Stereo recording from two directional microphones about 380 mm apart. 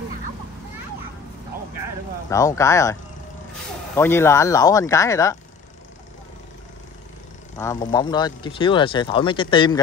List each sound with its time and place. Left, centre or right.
2.2 s speech: centre
7.5 s speech: centre